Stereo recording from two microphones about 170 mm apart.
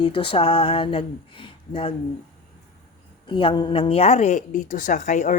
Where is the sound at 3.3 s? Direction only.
30° left (ahead or behind).